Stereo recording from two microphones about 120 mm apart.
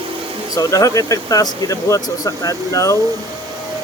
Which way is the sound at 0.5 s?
30° left (ahead or behind).